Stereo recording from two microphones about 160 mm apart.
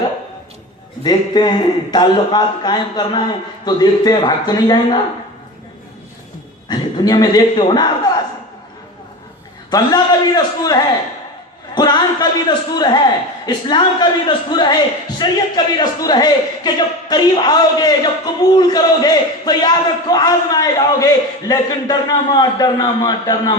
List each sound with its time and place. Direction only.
1.0 s a man's voice: 25° left (ahead or behind)
6.7 s a man's voice: 25° left (ahead or behind)
9.6 s a man's voice: 25° left (ahead or behind)